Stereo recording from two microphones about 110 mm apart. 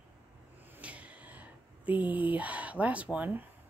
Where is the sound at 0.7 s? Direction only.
10° right (ahead or behind).